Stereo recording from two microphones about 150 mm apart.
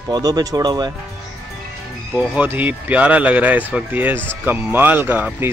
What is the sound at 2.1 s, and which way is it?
Speech, 10° right (ahead or behind).